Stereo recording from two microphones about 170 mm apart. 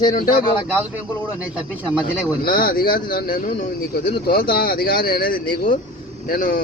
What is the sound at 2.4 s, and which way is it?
Speech, 60° left (ahead or behind).